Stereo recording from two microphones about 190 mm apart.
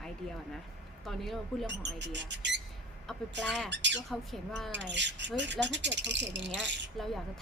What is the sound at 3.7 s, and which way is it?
Speech, 70° right (ahead or behind).